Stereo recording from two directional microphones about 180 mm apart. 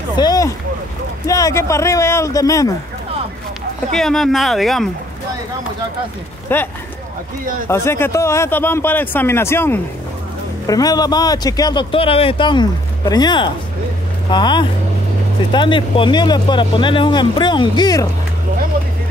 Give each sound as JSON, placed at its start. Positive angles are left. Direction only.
{"t": 0.1, "sound": "a man's voice", "side_deg": 20}
{"t": 3.9, "sound": "speech", "side_deg": 0}
{"t": 6.5, "sound": "a man's voice", "side_deg": 10}